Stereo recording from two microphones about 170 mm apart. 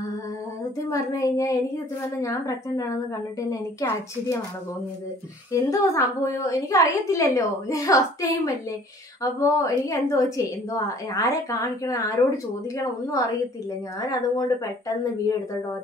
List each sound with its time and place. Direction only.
0.7 s a woman's voice: 20° left (ahead or behind)
5.5 s a woman's voice: 15° left (ahead or behind)